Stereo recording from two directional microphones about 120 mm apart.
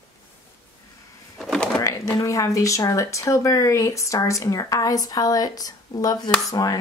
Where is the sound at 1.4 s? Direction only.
5° left (ahead or behind).